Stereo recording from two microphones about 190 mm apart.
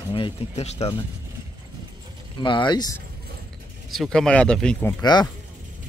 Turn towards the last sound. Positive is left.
turn(degrees=20)  # may be behind; listen again after turning